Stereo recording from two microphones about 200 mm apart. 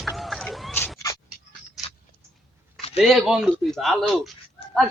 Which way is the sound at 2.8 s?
30° left (ahead or behind).